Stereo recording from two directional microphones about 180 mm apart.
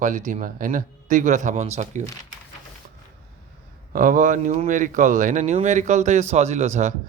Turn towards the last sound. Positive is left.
turn(degrees=-40)  # may be behind; listen again after turning